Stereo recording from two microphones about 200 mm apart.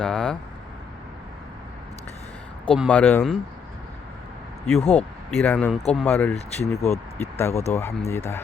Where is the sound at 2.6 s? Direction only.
5° left (ahead or behind).